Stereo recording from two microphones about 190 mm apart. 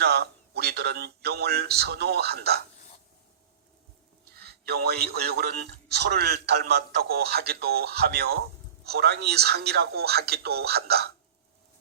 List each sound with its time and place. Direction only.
0.0 s a man's voice: 60° right (ahead or behind)
4.3 s a man's voice: 55° right (ahead or behind)